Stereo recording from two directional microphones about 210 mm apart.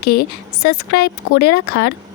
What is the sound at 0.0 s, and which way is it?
A woman's voice, 50° left (ahead or behind).